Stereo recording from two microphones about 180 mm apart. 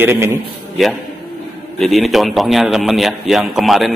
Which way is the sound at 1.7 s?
Centre (ahead or behind).